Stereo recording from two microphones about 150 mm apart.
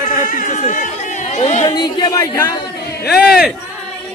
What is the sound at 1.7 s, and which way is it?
Speech, 25° left (ahead or behind).